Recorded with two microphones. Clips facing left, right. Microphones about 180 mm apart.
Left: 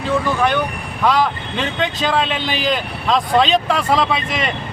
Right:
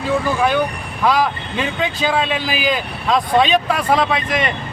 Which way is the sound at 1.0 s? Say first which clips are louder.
Even; 5° right (ahead or behind).